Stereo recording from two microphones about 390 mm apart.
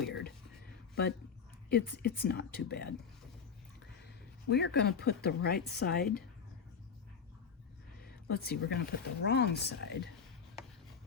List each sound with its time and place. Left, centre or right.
0.1 s speech: left
1.7 s speech: left
4.0 s a woman's voice: left
8.3 s speech: left